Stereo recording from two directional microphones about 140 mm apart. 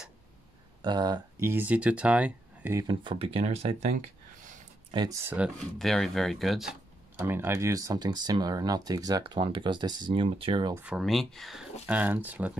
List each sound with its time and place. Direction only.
0.8 s speech: 30° right (ahead or behind)
1.4 s speech: 15° right (ahead or behind)
2.9 s speech: 35° right (ahead or behind)
4.9 s speech: 30° right (ahead or behind)
5.2 s speech: 10° right (ahead or behind)
5.8 s speech: centre (ahead or behind)
7.2 s speech: 15° right (ahead or behind); by 10.7 s 40° right (ahead or behind)
10.8 s speech: 5° right (ahead or behind)